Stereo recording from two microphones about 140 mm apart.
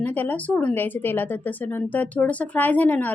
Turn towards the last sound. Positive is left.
turn(degrees=10)  # may be behind; listen again after turning